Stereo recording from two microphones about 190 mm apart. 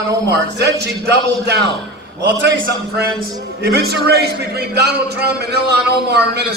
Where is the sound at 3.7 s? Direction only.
60° right (ahead or behind).